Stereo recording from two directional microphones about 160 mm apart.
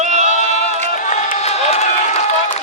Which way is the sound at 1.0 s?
50° left (ahead or behind).